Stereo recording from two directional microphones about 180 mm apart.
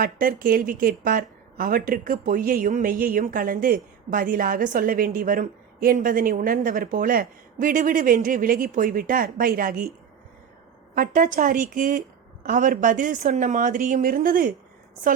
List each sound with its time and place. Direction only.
0.0 s a woman's voice: 50° right (ahead or behind)
10.9 s a woman's voice: 50° right (ahead or behind)